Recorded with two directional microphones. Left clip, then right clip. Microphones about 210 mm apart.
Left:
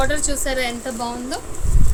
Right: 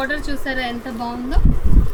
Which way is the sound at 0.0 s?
40° left (ahead or behind).